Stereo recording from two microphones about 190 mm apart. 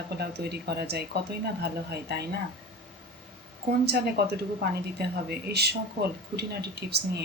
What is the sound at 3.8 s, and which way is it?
A woman's voice, 60° right (ahead or behind).